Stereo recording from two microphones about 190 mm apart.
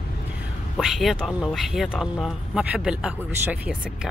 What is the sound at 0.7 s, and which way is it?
Speech, centre (ahead or behind).